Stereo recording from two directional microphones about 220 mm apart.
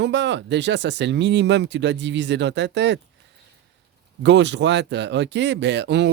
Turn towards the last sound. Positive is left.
turn(degrees=-50)  # may be behind; listen again after turning